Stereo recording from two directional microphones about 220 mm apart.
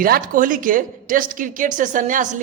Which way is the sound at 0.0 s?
40° right (ahead or behind).